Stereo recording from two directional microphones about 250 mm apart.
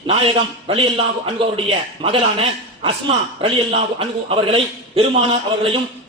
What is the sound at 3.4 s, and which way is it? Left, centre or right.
A man's voice, right.